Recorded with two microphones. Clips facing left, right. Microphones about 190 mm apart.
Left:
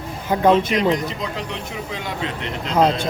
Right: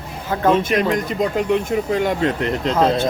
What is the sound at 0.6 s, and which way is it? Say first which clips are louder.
Speech: right 1 dB; 50° right (ahead or behind).